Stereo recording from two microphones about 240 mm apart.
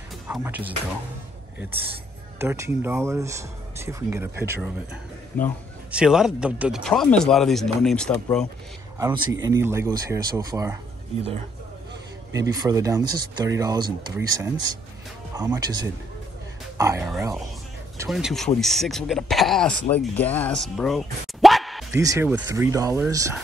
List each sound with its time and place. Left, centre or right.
0.3 s speech: centre
2.3 s speech: centre
5.9 s speech: centre
8.9 s speech: centre
12.4 s speech: centre
21.9 s speech: centre